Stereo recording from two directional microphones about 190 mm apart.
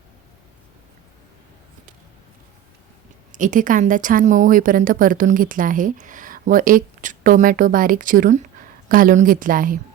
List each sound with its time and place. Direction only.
3.3 s a woman's voice: 45° right (ahead or behind)